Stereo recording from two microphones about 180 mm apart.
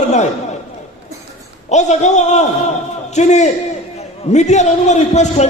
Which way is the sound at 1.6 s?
40° left (ahead or behind).